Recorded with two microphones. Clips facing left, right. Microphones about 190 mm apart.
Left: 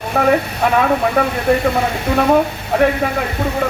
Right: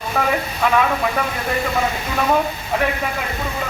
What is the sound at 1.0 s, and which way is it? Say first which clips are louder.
Speech: left 6 dB; 60° left (ahead or behind).